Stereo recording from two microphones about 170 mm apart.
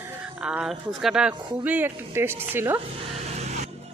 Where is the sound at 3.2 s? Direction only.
40° right (ahead or behind).